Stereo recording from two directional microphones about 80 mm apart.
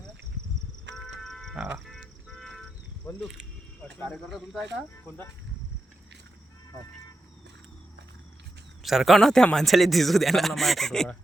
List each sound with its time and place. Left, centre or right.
0.9 s a sound: centre
1.5 s livestock: centre
1.9 s a sound: centre
3.2 s livestock: centre
4.1 s a man's voice: centre
5.0 s speech: left
8.8 s a man's voice: centre